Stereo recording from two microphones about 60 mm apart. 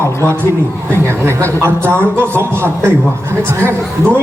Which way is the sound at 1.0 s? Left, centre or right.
Right.